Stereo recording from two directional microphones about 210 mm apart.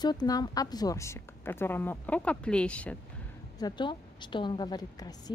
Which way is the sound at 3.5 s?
20° left (ahead or behind).